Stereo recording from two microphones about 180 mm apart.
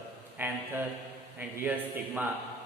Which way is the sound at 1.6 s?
10° right (ahead or behind).